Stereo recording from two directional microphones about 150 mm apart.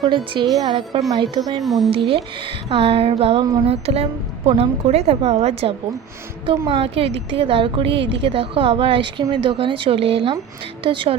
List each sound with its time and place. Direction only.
0.0 s a woman's voice: 30° right (ahead or behind)
1.6 s speech: centre (ahead or behind)
1.9 s a woman's voice: 40° right (ahead or behind)